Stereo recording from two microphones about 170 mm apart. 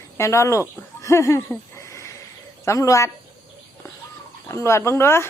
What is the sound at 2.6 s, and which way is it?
Speech, 20° left (ahead or behind).